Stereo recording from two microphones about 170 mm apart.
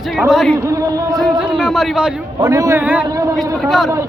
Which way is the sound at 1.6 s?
Centre (ahead or behind).